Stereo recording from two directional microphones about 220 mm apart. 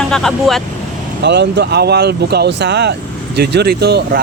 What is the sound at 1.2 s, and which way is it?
Speech, 50° right (ahead or behind).